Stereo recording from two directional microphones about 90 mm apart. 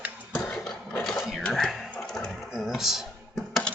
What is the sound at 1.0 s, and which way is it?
Cash register, centre (ahead or behind).